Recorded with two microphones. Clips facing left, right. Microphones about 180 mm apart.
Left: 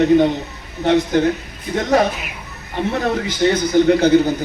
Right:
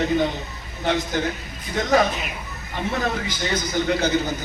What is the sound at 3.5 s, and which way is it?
Speech, 60° left (ahead or behind).